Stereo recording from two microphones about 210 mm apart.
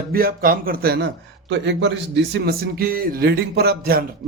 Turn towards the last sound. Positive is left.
turn(degrees=-45)  # may be behind; listen again after turning